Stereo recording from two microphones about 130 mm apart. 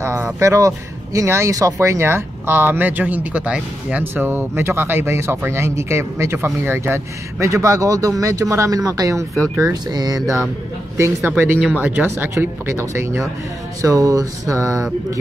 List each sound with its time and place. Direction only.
0.0 s speech: 25° right (ahead or behind)